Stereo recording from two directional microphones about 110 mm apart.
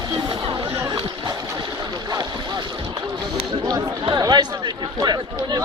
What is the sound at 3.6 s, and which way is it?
Chatter, 35° right (ahead or behind).